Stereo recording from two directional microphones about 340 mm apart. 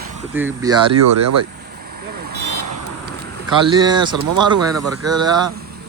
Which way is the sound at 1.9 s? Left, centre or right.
Right.